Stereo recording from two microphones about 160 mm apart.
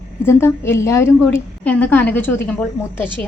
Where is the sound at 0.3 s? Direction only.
15° left (ahead or behind).